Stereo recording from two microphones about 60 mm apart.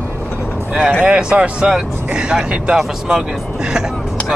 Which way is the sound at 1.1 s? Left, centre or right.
Centre.